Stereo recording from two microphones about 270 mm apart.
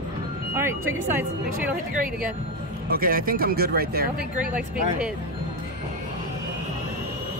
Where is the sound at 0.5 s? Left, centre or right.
Centre.